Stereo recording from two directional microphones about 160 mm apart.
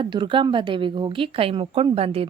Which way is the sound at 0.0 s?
30° right (ahead or behind).